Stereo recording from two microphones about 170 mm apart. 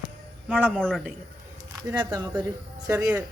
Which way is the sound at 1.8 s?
20° right (ahead or behind).